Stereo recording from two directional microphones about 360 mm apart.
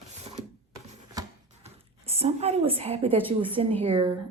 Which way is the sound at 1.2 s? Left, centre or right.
Centre.